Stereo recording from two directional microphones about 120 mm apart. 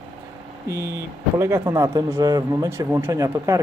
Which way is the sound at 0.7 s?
20° right (ahead or behind).